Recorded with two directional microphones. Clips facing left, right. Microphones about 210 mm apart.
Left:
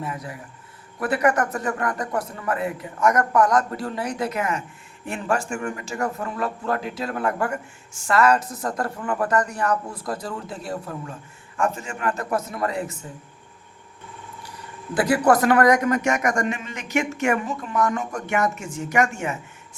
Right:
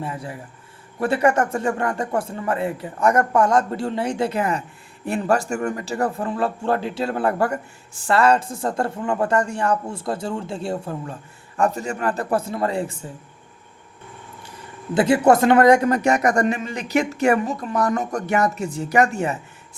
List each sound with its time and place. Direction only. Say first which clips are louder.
0.0 s a man's voice: right 2 dB; 30° right (ahead or behind)
14.9 s a man's voice: right 3 dB; 25° right (ahead or behind)